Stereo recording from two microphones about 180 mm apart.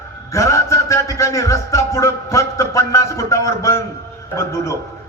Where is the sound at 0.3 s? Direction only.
15° left (ahead or behind).